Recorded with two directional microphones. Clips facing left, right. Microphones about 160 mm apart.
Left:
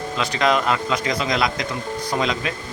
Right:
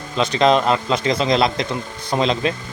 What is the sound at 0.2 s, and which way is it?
Speech, 25° right (ahead or behind).